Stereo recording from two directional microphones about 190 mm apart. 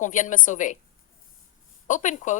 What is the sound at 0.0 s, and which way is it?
Speech, 40° left (ahead or behind).